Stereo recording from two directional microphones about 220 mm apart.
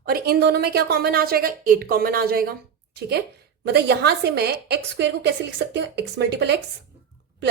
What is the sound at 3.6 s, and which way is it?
A woman's voice, 50° right (ahead or behind).